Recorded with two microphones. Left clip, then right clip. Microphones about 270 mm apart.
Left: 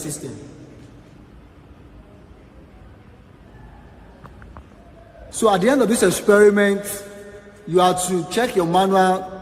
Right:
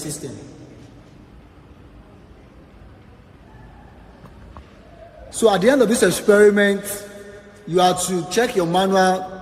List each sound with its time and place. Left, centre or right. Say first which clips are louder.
5.4 s a man's voice: right 1 dB; left
7.7 s a man's voice: even; left